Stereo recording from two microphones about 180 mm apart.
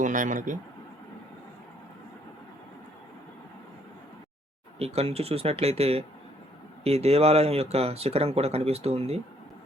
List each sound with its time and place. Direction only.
0.0 s speech: 45° right (ahead or behind)
4.8 s speech: 35° right (ahead or behind)